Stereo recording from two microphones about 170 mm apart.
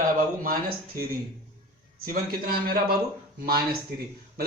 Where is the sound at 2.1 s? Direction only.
60° right (ahead or behind).